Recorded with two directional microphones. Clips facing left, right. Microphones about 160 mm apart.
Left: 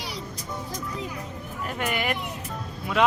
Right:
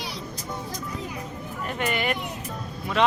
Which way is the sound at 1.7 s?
Centre (ahead or behind).